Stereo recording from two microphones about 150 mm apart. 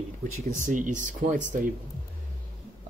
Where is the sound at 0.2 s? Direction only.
60° right (ahead or behind).